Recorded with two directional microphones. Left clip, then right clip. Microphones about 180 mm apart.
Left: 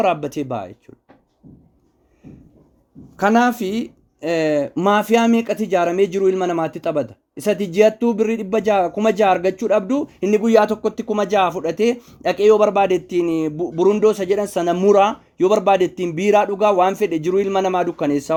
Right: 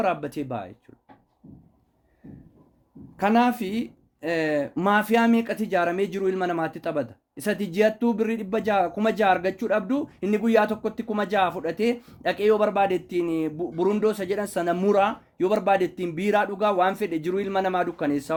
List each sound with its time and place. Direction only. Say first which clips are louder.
0.0 s speech: left 7 dB; 30° left (ahead or behind)
3.2 s speech: left 5 dB; 35° left (ahead or behind)